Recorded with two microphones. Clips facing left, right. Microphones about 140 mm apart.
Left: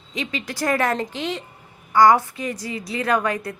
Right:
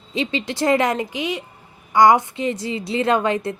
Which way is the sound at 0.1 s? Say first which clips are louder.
Right 5 dB; 30° right (ahead or behind).